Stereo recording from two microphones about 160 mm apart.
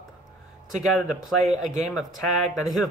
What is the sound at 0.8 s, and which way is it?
Speech, centre (ahead or behind).